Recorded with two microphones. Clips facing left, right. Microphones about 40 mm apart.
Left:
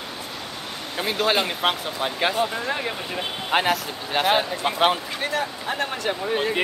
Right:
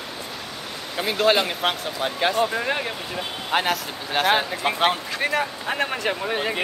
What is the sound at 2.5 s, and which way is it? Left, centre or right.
Speech, centre.